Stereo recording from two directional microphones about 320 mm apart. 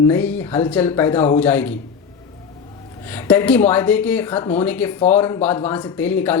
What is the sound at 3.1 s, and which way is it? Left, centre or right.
Speech, centre.